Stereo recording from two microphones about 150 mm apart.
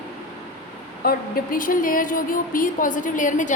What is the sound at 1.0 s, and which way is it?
A woman's voice, 85° left.